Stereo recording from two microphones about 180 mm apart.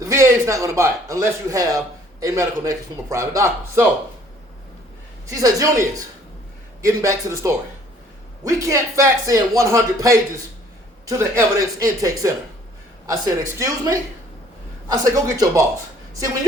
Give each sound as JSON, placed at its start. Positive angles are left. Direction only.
{"t": 0.0, "sound": "a man's voice", "side_deg": -15}
{"t": 5.3, "sound": "speech", "side_deg": -20}
{"t": 6.8, "sound": "a man's voice", "side_deg": -15}
{"t": 15.1, "sound": "a man's voice", "side_deg": -20}